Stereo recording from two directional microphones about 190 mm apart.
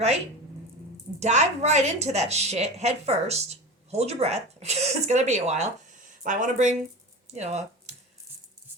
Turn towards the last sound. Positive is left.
turn(degrees=-35)  # may be behind; listen again after turning